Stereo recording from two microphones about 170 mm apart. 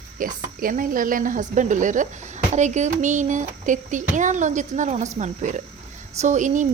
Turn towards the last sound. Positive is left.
turn(degrees=-45)  # may be behind; listen again after turning